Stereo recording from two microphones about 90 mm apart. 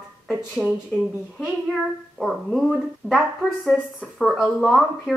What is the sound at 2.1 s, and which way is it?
Speech, centre (ahead or behind).